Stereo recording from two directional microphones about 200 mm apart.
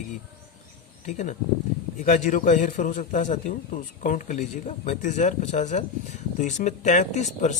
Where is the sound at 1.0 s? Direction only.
35° left (ahead or behind).